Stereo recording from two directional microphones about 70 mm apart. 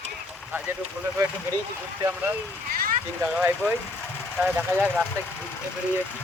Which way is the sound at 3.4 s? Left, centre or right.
Right.